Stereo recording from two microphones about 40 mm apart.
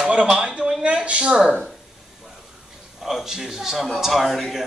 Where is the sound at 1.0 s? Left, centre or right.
Right.